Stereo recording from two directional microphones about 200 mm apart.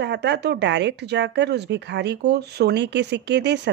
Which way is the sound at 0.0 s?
60° right (ahead or behind).